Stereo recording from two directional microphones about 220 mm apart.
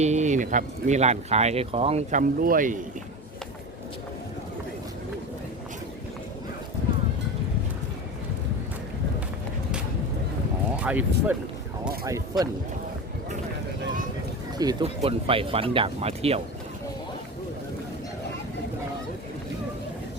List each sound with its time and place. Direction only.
0.0 s speech: 30° right (ahead or behind)
10.8 s speech: 5° right (ahead or behind)
14.6 s speech: 20° right (ahead or behind)